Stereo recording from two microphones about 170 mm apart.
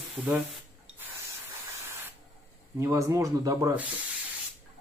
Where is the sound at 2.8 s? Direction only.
20° right (ahead or behind).